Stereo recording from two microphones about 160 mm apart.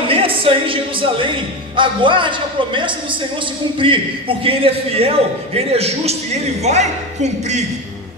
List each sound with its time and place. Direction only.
0.1 s a man's voice: 35° right (ahead or behind)